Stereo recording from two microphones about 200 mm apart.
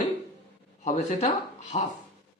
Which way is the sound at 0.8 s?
35° left (ahead or behind).